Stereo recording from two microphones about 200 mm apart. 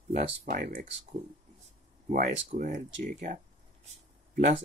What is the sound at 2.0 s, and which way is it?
Speech, 40° right (ahead or behind).